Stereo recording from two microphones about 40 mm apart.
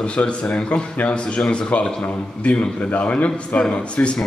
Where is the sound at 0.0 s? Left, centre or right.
Left.